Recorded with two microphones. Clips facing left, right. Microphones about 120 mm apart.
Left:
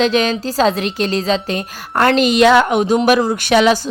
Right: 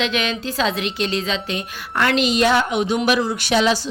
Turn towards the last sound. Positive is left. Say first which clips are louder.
# left 5 dB
turn(degrees=60)  # may be behind; listen again after turning